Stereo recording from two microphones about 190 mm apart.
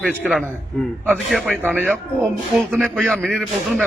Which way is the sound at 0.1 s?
5° right (ahead or behind).